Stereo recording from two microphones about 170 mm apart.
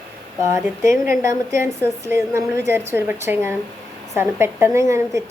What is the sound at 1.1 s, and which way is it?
A woman's voice, 15° right (ahead or behind).